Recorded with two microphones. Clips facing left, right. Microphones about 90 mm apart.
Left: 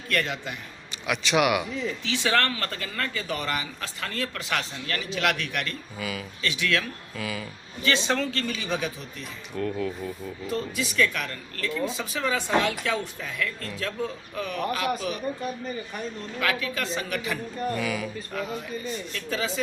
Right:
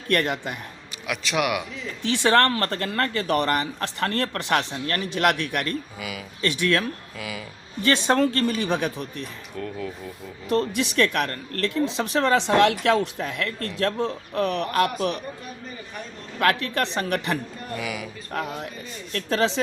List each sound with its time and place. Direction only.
0.1 s speech: 50° right (ahead or behind)
1.0 s speech: centre (ahead or behind)
2.0 s speech: 50° right (ahead or behind)
6.0 s speech: 15° right (ahead or behind)
6.4 s speech: 45° right (ahead or behind)
7.2 s speech: 15° right (ahead or behind)
7.8 s speech: 50° right (ahead or behind)
9.6 s speech: centre (ahead or behind)
10.4 s speech: 65° right (ahead or behind)
16.4 s speech: 55° right (ahead or behind)
17.7 s speech: 15° right (ahead or behind)
18.3 s speech: 65° right (ahead or behind)